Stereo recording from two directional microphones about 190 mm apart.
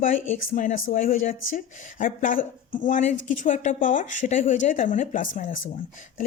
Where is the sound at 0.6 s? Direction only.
40° left (ahead or behind).